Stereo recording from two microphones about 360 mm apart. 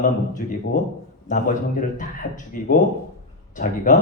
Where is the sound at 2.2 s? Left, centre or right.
Left.